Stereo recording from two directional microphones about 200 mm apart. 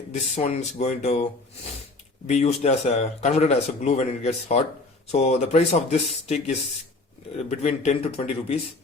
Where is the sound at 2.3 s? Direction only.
35° left (ahead or behind).